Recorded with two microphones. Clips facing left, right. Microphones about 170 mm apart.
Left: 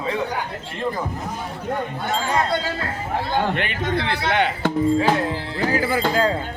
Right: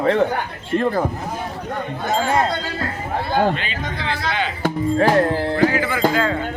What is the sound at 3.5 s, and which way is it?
A man's voice, 65° left (ahead or behind).